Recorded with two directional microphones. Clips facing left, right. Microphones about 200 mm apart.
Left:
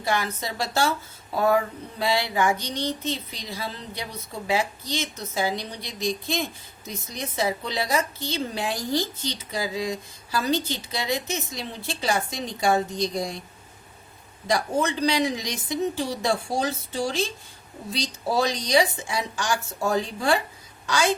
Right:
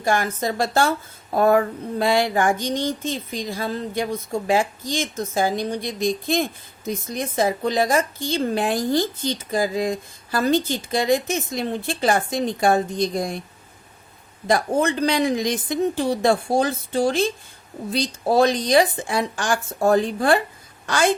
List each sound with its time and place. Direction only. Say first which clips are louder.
0.0 s a woman's voice: right 5 dB; 50° right (ahead or behind)
14.4 s a woman's voice: right 4 dB; 55° right (ahead or behind)